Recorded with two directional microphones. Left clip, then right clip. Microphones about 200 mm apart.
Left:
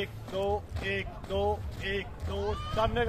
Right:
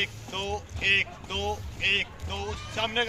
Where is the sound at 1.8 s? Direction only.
50° left (ahead or behind).